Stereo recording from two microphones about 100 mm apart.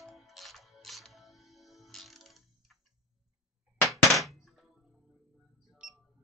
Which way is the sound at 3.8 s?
Centre (ahead or behind).